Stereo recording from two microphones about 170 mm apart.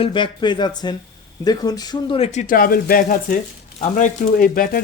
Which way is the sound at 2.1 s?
40° left (ahead or behind).